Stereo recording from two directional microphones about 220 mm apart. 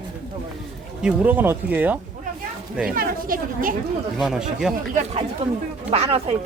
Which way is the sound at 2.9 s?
40° right (ahead or behind).